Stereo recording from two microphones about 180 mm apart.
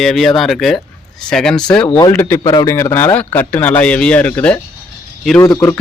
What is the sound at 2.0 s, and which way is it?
Speech, 15° left (ahead or behind).